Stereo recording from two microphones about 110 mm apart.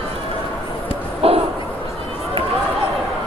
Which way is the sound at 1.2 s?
65° right (ahead or behind).